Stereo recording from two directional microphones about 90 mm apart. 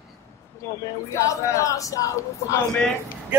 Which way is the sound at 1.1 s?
35° left (ahead or behind).